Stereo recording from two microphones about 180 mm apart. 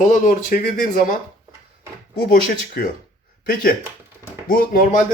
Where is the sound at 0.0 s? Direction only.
45° left (ahead or behind).